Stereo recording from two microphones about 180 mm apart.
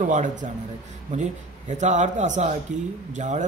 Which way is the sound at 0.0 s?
45° right (ahead or behind).